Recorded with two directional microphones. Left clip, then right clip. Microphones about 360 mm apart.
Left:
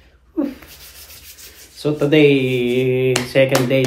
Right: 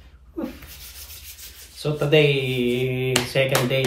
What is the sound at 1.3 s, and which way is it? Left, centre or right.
Speech, centre.